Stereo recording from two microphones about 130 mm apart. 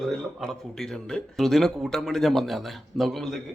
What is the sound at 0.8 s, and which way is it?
Speech, 5° left (ahead or behind).